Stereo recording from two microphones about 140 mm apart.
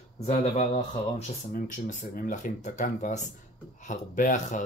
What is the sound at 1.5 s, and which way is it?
Speech, 65° left (ahead or behind).